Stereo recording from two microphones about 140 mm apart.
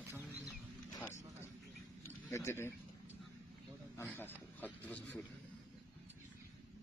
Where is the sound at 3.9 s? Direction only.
15° left (ahead or behind).